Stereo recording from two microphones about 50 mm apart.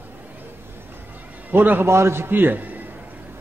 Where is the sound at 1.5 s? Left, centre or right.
Right.